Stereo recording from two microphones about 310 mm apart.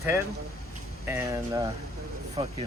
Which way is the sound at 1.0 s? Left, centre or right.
Centre.